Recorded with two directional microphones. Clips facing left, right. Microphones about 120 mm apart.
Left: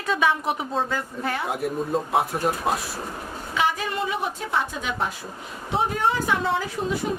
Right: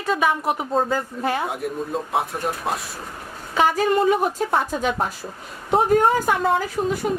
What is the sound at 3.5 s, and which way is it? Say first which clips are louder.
A woman's voice: right 7 dB; 45° right (ahead or behind).